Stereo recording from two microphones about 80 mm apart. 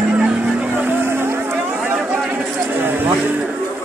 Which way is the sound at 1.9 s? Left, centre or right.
Centre.